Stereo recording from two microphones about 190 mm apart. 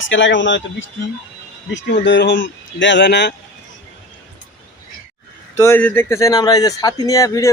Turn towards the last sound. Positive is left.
turn(degrees=15)  # may be behind; listen again after turning